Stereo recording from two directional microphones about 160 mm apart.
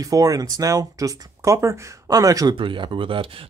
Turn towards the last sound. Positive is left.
turn(degrees=-30)  # may be behind; listen again after turning